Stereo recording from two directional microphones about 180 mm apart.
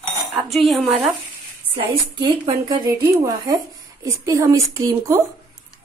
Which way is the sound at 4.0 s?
20° right (ahead or behind).